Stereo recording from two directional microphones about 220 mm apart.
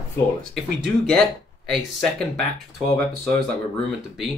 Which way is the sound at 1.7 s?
Centre (ahead or behind).